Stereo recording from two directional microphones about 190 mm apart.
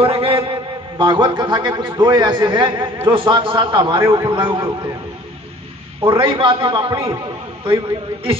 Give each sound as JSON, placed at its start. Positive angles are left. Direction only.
{"t": 0.0, "sound": "a man's voice", "side_deg": -30}
{"t": 6.0, "sound": "a man's voice", "side_deg": -25}